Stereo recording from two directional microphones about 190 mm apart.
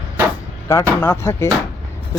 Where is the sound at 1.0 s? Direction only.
15° left (ahead or behind).